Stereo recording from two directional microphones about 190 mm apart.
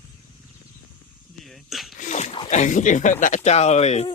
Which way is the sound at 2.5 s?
40° left (ahead or behind).